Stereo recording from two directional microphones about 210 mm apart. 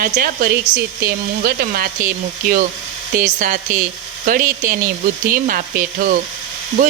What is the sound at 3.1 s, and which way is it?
Speech, 40° right (ahead or behind).